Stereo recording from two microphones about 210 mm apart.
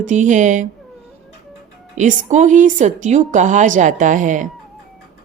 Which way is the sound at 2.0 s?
35° right (ahead or behind).